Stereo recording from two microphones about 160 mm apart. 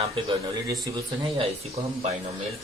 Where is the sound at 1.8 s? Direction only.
40° right (ahead or behind).